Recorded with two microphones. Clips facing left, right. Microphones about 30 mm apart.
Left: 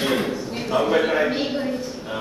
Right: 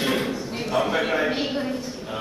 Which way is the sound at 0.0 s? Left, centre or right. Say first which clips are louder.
Left 2 dB; centre.